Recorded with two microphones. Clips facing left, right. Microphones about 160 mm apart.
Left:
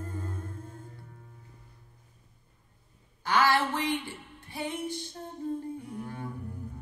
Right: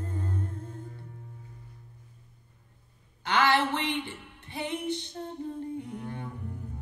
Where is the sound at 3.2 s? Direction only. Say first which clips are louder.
Even; 20° right (ahead or behind).